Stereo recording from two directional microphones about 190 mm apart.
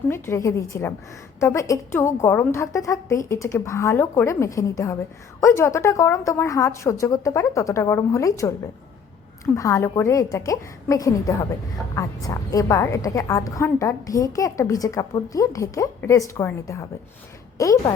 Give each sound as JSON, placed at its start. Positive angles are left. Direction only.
{"t": 0.1, "sound": "a woman's voice", "side_deg": 15}
{"t": 9.6, "sound": "a woman's voice", "side_deg": 15}